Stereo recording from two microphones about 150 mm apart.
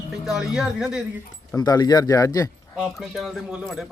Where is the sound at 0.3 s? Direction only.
5° right (ahead or behind).